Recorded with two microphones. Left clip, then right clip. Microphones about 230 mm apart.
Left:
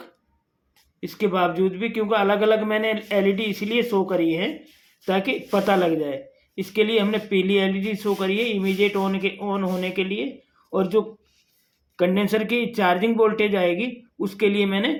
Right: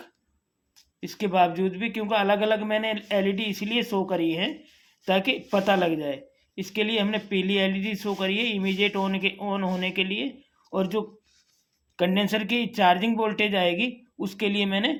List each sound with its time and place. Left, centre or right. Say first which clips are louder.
1.0 s speech: left 1 dB; right